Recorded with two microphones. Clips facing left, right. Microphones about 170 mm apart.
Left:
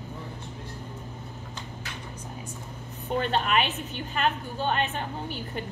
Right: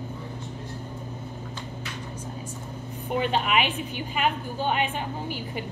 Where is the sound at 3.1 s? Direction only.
10° right (ahead or behind).